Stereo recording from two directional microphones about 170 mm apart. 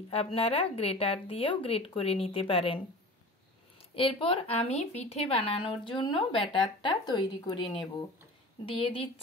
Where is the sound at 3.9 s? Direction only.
30° left (ahead or behind).